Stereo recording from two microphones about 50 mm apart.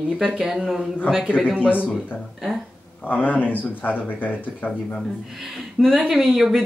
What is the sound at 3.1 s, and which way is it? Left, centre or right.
Speech, left.